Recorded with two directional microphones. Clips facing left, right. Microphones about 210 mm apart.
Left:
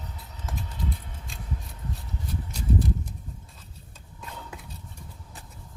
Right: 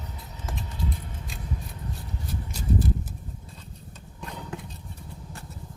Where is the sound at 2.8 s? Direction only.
5° right (ahead or behind).